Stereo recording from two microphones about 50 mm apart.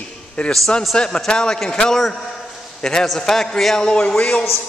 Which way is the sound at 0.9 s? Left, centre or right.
Centre.